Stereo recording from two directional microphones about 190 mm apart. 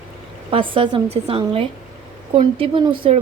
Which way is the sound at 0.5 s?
25° right (ahead or behind).